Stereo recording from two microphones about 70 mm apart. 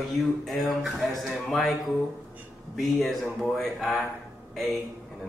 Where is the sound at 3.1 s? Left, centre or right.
Centre.